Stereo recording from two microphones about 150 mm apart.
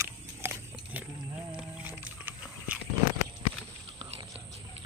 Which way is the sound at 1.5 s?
10° right (ahead or behind).